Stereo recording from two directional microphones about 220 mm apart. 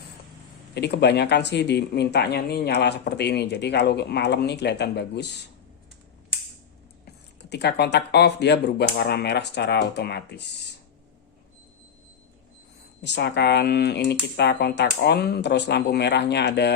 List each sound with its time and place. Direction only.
0.7 s speech: 50° left (ahead or behind)
7.5 s speech: 50° left (ahead or behind)
13.0 s speech: 50° left (ahead or behind)